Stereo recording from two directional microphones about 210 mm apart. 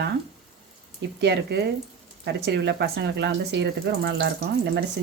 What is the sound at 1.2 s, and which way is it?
Speech, 55° right (ahead or behind).